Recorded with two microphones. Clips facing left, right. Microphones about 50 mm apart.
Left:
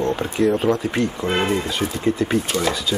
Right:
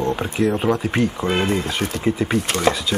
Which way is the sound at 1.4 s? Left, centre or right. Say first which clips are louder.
Left 1 dB; left.